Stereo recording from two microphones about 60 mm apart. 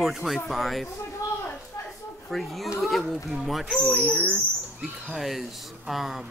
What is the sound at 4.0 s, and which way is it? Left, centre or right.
Speech, centre.